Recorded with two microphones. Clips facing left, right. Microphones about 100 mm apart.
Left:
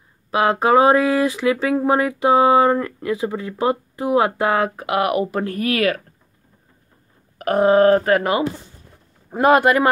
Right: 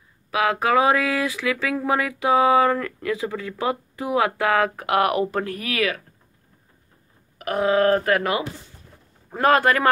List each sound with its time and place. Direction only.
0.3 s speech: 30° left (ahead or behind)
5.4 s speech: 40° left (ahead or behind)
7.3 s speech: 40° left (ahead or behind)
9.3 s speech: 15° left (ahead or behind)